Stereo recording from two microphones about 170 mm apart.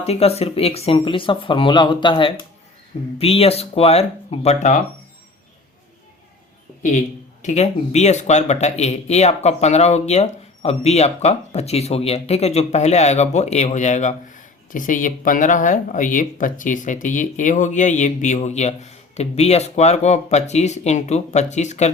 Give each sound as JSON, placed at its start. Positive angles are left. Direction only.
{"t": 0.0, "sound": "speech", "side_deg": 35}
{"t": 7.4, "sound": "speech", "side_deg": 40}